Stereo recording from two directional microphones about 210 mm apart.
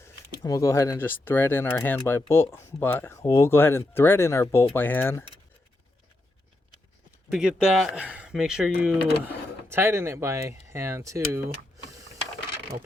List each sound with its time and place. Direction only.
0.0 s speech: 15° left (ahead or behind)
7.3 s speech: 5° right (ahead or behind)